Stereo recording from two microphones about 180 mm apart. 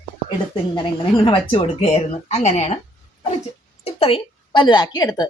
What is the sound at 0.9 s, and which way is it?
Speech, 30° left (ahead or behind).